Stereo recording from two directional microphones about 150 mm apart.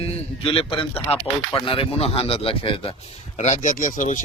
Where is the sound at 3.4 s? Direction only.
55° left (ahead or behind).